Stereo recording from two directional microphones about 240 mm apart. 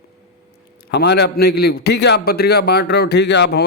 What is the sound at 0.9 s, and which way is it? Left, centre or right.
A man's voice, left.